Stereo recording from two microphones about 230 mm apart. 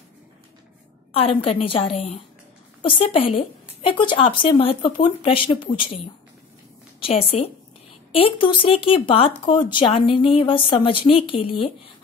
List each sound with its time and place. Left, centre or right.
1.1 s speech: left
7.0 s a woman's voice: left